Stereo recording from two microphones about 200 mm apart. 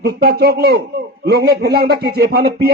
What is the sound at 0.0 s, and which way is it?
Speech, 55° right (ahead or behind).